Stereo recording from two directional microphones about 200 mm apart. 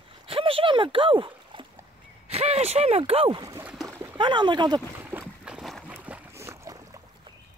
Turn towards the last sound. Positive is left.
turn(degrees=-15)  # may be behind; listen again after turning